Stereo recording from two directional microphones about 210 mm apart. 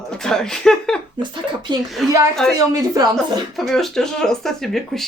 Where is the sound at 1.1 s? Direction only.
20° right (ahead or behind).